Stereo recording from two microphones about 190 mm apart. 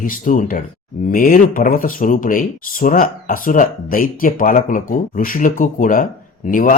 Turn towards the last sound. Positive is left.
turn(degrees=45)  # may be behind; listen again after turning